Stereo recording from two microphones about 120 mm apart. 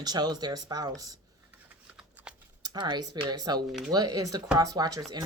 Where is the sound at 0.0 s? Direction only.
35° right (ahead or behind).